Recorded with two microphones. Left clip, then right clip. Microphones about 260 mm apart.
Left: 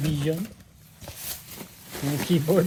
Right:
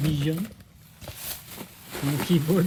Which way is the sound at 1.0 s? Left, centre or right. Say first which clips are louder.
Even; right.